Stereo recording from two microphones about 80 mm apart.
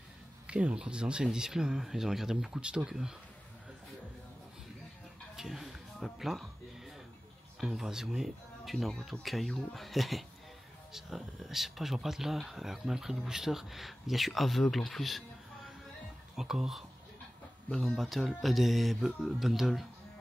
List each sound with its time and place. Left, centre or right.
0.5 s speech: centre
5.3 s a sound: centre
7.6 s speech: centre